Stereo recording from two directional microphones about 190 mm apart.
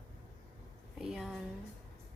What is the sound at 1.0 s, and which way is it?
Speech, centre (ahead or behind).